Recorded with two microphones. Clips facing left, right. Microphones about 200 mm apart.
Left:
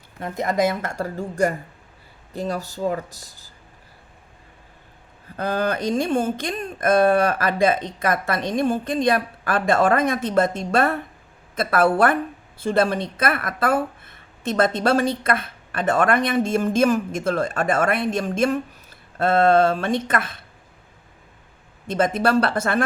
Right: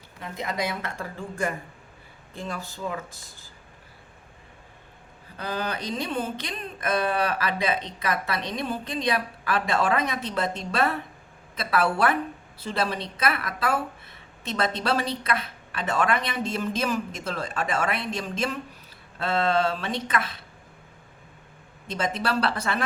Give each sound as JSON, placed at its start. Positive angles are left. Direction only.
{"t": 0.2, "sound": "a woman's voice", "side_deg": 45}
{"t": 5.4, "sound": "a woman's voice", "side_deg": 50}
{"t": 21.8, "sound": "a woman's voice", "side_deg": 50}